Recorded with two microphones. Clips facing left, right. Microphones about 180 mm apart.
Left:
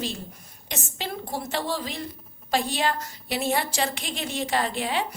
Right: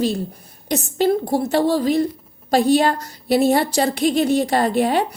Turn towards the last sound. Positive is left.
turn(degrees=-45)  # may be behind; listen again after turning